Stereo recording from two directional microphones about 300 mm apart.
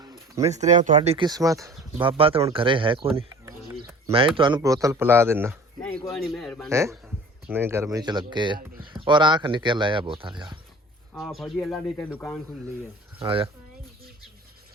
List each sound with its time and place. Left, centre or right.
0.0 s speech: centre
6.7 s speech: centre
11.1 s speech: centre
13.1 s speech: centre